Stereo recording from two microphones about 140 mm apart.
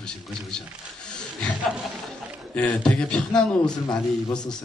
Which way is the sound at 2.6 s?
5° left (ahead or behind).